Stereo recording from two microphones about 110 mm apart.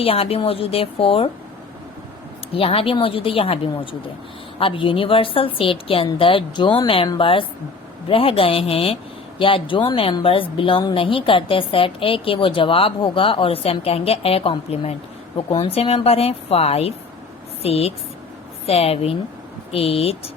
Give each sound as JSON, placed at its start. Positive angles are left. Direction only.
{"t": 0.0, "sound": "speech", "side_deg": 60}
{"t": 2.5, "sound": "speech", "side_deg": 55}
{"t": 4.6, "sound": "a woman's voice", "side_deg": 50}